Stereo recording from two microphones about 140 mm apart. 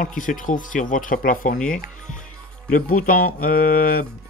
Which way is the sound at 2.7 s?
85° left.